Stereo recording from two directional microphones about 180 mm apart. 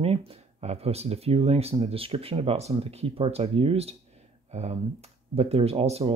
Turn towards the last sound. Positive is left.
turn(degrees=-35)  # may be behind; listen again after turning